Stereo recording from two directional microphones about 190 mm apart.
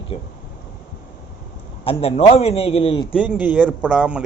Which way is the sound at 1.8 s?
30° left (ahead or behind).